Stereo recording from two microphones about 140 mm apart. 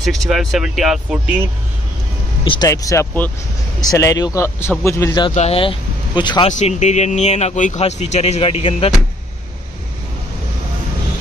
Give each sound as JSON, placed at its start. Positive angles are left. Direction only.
{"t": 0.0, "sound": "speech", "side_deg": 0}
{"t": 2.4, "sound": "speech", "side_deg": 35}
{"t": 2.7, "sound": "speech", "side_deg": 20}
{"t": 5.3, "sound": "speech", "side_deg": 50}
{"t": 6.6, "sound": "a man's voice", "side_deg": 55}